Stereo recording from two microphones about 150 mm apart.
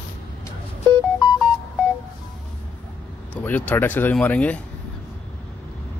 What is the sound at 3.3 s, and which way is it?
Speech, 10° left (ahead or behind).